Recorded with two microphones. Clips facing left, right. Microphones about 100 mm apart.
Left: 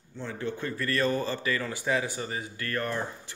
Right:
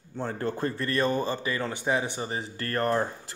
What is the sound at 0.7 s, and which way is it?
A man's voice, 25° right (ahead or behind).